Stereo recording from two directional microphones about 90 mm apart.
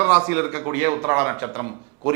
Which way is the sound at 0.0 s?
15° right (ahead or behind).